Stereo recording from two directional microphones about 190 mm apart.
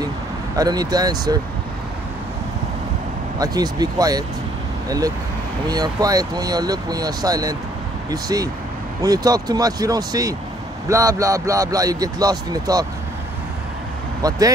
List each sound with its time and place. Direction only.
0.6 s speech: 20° right (ahead or behind)
3.3 s speech: 20° right (ahead or behind)
14.2 s speech: 20° right (ahead or behind)